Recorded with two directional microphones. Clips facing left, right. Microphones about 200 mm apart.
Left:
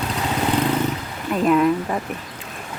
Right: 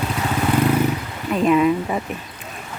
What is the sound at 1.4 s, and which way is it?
Speech, 5° right (ahead or behind).